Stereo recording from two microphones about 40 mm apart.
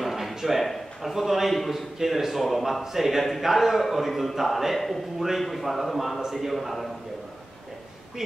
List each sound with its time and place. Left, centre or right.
0.0 s a man's voice: centre